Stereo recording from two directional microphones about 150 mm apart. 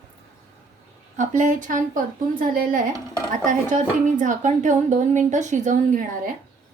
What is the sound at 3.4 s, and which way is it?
Speech, 55° right (ahead or behind).